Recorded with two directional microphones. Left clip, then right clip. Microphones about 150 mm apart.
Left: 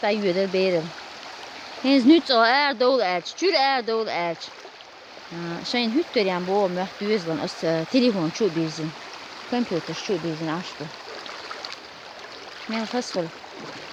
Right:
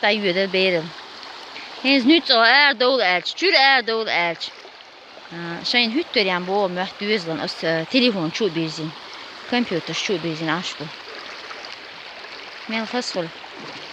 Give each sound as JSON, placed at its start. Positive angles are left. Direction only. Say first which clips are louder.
{"t": 0.0, "sound": "speech", "louder": "right 3 dB", "side_deg": 10}
{"t": 1.8, "sound": "speech", "louder": "right 1 dB", "side_deg": 30}
{"t": 5.6, "sound": "speech", "louder": "right 5 dB", "side_deg": 20}
{"t": 9.5, "sound": "speech", "louder": "right 4 dB", "side_deg": 0}
{"t": 12.7, "sound": "speech", "louder": "right 2 dB", "side_deg": 5}